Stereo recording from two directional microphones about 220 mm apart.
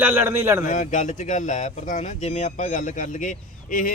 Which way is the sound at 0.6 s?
35° left (ahead or behind).